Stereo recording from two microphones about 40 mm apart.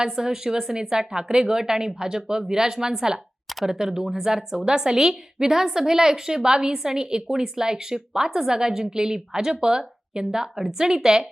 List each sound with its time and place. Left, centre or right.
0.0 s a woman's voice: centre